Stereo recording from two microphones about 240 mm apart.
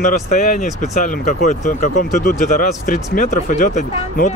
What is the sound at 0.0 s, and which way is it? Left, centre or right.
Speech, left.